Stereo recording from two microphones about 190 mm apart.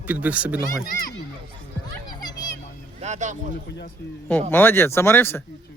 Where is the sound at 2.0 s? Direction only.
20° left (ahead or behind).